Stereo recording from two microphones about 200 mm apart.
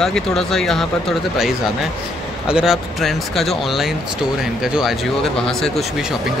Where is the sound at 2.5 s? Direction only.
5° right (ahead or behind).